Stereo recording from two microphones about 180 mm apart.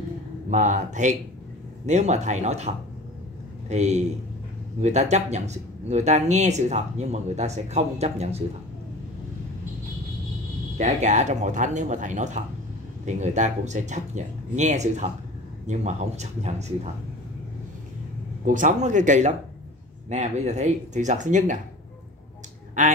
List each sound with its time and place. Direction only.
0.5 s speech: 40° right (ahead or behind)
10.8 s speech: 40° right (ahead or behind)
18.4 s speech: 45° right (ahead or behind)